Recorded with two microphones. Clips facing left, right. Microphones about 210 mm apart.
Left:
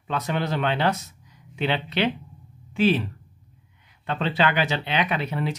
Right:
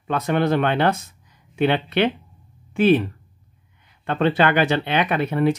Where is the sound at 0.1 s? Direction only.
55° right (ahead or behind).